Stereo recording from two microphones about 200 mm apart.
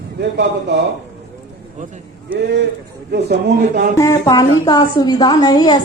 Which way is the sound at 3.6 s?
40° right (ahead or behind).